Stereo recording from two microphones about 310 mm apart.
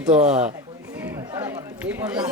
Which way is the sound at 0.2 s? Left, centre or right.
Right.